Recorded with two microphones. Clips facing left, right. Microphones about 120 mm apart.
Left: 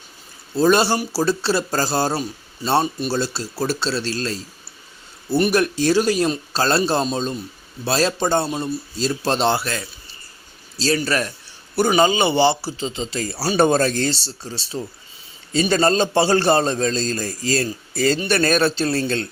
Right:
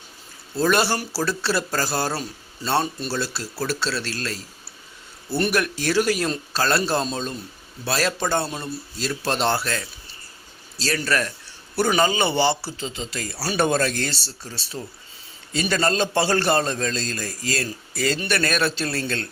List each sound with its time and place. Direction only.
0.5 s speech: 25° left (ahead or behind)
5.5 s speech: 25° left (ahead or behind)
9.6 s speech: 5° left (ahead or behind)
10.8 s a man's voice: 20° left (ahead or behind)